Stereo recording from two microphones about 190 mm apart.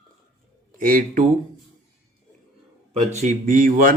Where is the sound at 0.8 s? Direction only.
45° right (ahead or behind).